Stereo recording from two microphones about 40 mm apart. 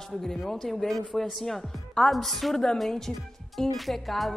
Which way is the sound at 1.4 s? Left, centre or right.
Centre.